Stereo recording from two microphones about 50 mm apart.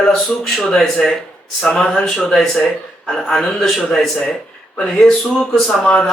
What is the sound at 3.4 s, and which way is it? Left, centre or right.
Speech, centre.